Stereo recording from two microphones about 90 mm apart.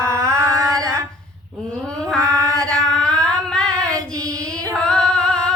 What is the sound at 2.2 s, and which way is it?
Female singing, 40° right (ahead or behind).